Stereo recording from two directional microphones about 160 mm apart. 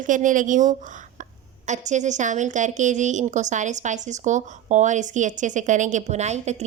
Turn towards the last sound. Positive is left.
turn(degrees=-45)  # may be behind; listen again after turning